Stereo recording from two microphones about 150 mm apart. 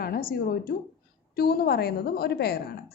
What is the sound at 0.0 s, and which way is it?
Speech, 85° left.